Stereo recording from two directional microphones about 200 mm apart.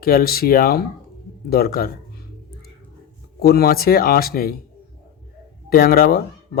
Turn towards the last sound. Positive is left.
turn(degrees=50)  # may be behind; listen again after turning